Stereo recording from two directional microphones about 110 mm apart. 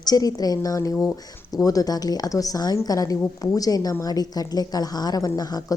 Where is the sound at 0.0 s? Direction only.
35° left (ahead or behind).